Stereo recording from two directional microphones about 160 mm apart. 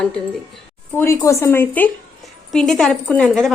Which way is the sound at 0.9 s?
15° left (ahead or behind).